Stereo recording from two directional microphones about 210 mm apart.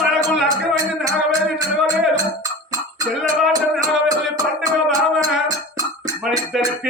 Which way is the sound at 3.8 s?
15° right (ahead or behind).